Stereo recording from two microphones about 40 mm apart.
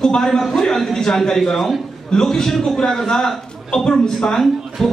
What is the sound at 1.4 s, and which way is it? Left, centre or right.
Speech, centre.